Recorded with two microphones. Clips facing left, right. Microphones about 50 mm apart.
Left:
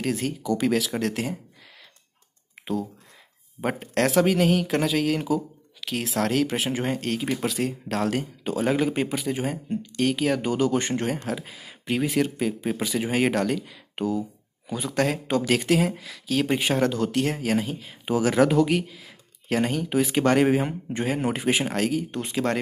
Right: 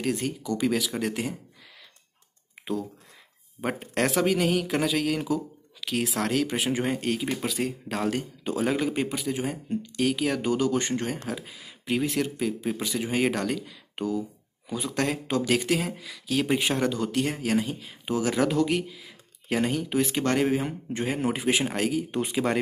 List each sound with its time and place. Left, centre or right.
0.0 s speech: centre
3.9 s speech: centre
7.6 s speech: centre
8.1 s speech: centre
12.0 s speech: centre
14.7 s speech: centre
18.0 s speech: centre
18.4 s speech: centre